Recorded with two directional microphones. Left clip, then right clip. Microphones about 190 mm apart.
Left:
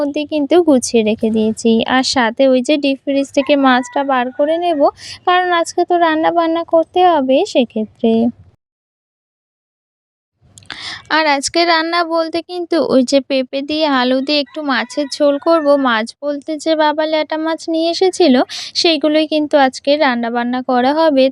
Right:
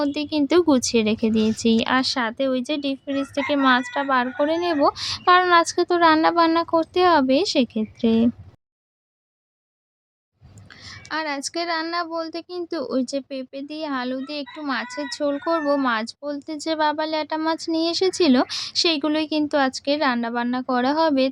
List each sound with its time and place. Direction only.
0.0 s speech: 25° left (ahead or behind)
10.5 s speech: 50° left (ahead or behind); by 21.2 s 30° left (ahead or behind)